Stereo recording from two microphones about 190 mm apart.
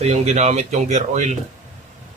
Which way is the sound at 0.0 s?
35° right (ahead or behind).